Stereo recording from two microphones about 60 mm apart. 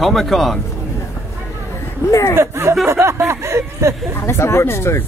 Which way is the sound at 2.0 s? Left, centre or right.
Left.